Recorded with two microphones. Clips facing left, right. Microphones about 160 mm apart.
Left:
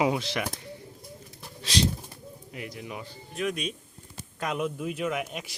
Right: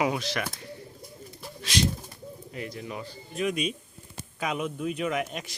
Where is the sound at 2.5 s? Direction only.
15° left (ahead or behind).